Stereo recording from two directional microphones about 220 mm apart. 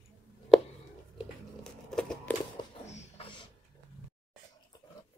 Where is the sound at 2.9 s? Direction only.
30° left (ahead or behind).